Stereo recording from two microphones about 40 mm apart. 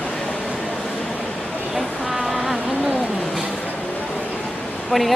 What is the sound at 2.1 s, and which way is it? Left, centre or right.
Insect, centre.